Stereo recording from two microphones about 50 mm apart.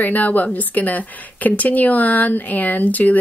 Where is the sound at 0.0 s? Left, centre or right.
Left.